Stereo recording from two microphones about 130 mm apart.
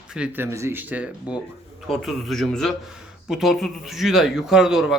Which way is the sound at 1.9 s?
Centre (ahead or behind).